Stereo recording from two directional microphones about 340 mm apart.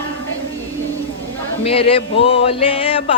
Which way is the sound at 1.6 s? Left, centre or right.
Centre.